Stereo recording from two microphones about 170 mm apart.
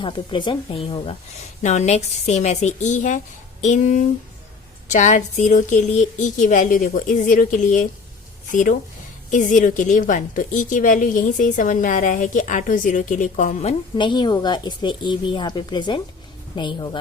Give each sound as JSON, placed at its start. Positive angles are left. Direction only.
{"t": 0.0, "sound": "speech", "side_deg": 30}
{"t": 1.6, "sound": "a woman's voice", "side_deg": 45}
{"t": 9.3, "sound": "a woman's voice", "side_deg": 45}